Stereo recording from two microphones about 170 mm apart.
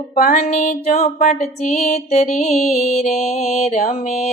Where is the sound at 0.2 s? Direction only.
55° left (ahead or behind).